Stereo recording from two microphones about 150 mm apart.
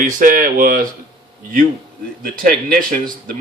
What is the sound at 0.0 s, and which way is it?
Speech, 60° right (ahead or behind).